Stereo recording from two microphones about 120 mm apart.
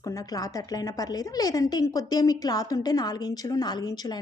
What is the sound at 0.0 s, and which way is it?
A woman's voice, 30° left (ahead or behind).